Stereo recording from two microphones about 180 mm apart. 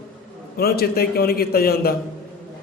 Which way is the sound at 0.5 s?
60° left (ahead or behind).